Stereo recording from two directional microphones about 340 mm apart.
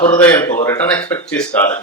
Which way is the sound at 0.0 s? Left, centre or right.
Centre.